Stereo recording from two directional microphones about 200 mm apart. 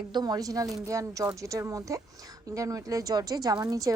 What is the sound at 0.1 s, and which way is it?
A woman's voice, 20° right (ahead or behind).